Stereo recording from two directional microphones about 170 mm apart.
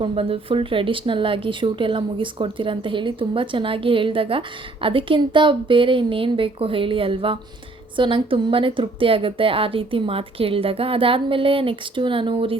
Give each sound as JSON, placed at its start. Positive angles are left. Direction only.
{"t": 0.0, "sound": "speech", "side_deg": -35}